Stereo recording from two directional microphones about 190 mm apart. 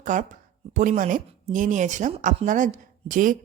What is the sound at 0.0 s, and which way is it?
Speech, 40° right (ahead or behind).